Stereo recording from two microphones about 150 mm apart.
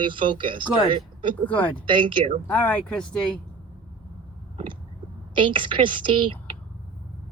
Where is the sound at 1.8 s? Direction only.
35° right (ahead or behind).